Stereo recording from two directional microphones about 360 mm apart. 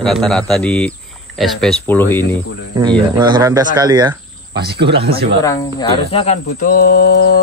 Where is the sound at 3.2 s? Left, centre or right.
Centre.